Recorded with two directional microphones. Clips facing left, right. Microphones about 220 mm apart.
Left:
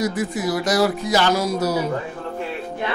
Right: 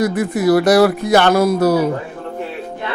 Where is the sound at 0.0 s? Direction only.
60° right (ahead or behind).